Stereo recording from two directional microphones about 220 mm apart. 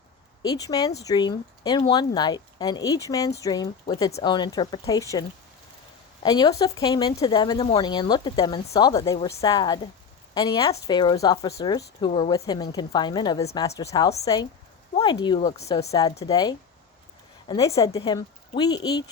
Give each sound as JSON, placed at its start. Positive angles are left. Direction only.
{"t": 0.4, "sound": "speech", "side_deg": 15}
{"t": 6.2, "sound": "speech", "side_deg": 15}